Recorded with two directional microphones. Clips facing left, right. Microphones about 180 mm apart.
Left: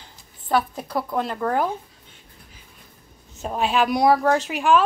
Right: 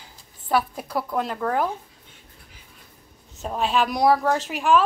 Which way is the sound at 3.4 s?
5° left (ahead or behind).